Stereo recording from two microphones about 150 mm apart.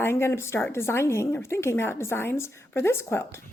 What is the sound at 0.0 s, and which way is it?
A woman's voice, 15° left (ahead or behind).